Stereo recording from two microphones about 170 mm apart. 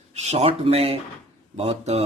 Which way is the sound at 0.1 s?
40° right (ahead or behind).